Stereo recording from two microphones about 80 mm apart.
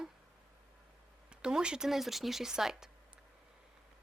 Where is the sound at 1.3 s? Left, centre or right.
Centre.